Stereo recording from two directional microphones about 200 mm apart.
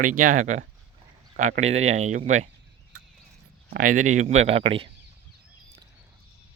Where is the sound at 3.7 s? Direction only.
40° right (ahead or behind).